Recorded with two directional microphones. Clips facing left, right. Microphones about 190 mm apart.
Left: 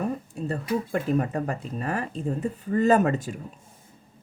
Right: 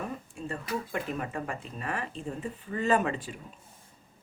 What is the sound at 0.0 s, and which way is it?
Speech, 40° left (ahead or behind).